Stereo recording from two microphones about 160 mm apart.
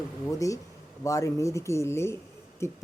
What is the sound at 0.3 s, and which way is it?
Speech, 20° left (ahead or behind).